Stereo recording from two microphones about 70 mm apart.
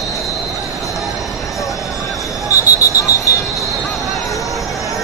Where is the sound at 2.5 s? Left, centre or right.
Left.